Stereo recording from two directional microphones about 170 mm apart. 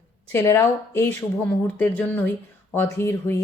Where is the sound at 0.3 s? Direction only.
15° left (ahead or behind).